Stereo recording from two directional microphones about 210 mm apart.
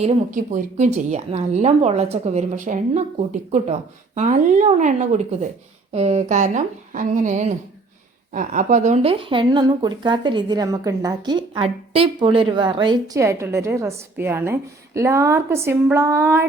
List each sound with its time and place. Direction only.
0.0 s a woman's voice: 35° right (ahead or behind); by 16.5 s 10° right (ahead or behind)